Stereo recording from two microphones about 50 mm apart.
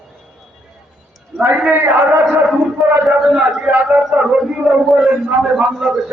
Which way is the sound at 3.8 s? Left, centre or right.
Right.